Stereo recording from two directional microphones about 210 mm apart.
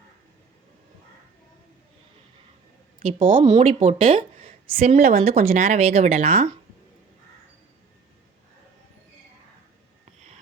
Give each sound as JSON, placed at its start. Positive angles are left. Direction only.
{"t": 3.0, "sound": "speech", "side_deg": -35}